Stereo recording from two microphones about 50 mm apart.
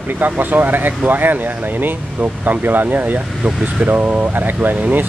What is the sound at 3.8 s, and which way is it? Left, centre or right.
Speech, right.